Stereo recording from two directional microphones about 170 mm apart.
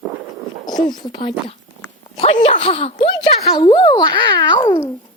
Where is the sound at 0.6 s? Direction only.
25° left (ahead or behind).